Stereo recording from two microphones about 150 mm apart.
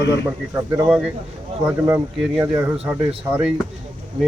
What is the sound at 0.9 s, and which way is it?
Speech, 5° right (ahead or behind).